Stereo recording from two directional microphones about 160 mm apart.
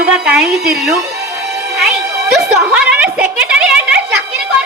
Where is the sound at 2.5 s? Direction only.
10° right (ahead or behind).